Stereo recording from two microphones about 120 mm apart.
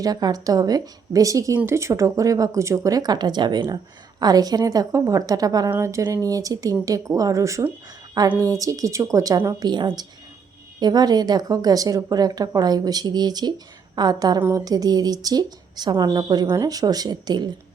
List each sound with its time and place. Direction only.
0.0 s speech: 35° right (ahead or behind)